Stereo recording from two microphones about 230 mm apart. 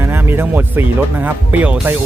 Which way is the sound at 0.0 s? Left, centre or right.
Centre.